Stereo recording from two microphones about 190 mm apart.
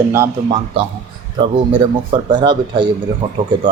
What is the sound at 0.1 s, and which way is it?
Speech, 15° right (ahead or behind).